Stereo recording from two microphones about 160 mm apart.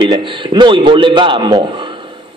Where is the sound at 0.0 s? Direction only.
30° right (ahead or behind).